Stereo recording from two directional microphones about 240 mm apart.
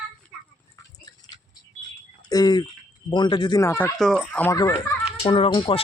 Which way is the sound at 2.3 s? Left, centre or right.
Centre.